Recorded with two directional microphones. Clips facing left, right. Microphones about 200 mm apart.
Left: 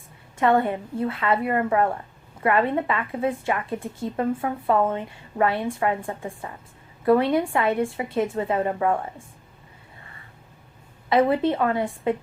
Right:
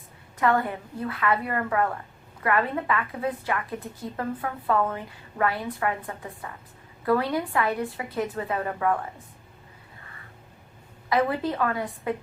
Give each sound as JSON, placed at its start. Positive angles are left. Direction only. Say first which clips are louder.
{"t": 0.3, "sound": "a woman's voice", "louder": "left 4 dB", "side_deg": 25}
{"t": 11.1, "sound": "a woman's voice", "louder": "left 5 dB", "side_deg": 25}